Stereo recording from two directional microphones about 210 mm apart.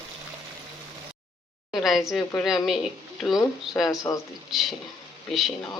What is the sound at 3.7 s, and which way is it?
Speech, 15° left (ahead or behind).